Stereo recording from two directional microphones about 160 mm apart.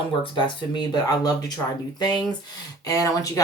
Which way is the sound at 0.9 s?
25° left (ahead or behind).